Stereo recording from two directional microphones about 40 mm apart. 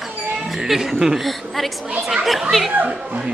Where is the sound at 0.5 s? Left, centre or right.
Centre.